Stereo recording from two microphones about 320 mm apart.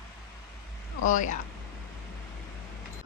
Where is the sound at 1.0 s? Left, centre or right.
Left.